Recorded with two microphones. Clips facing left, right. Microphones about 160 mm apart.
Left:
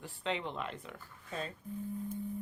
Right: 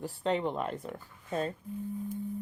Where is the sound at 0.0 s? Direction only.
40° right (ahead or behind).